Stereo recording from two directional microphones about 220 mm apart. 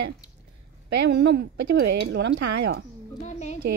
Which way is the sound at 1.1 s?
50° right (ahead or behind).